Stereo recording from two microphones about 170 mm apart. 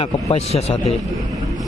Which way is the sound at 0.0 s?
35° left (ahead or behind).